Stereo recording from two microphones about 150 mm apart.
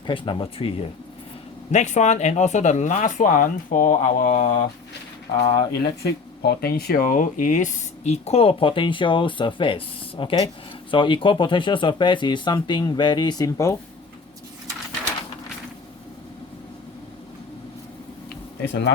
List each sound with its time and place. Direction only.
0.1 s speech: 35° left (ahead or behind)
1.7 s speech: 50° left (ahead or behind)
5.5 s speech: 40° left (ahead or behind)
6.0 s speech: 90° left; by 13.7 s 20° left (ahead or behind)